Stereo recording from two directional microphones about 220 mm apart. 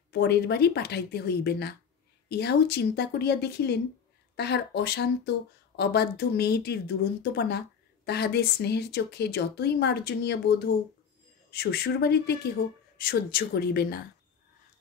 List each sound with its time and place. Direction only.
0.1 s speech: 50° left (ahead or behind)
11.5 s speech: 45° left (ahead or behind)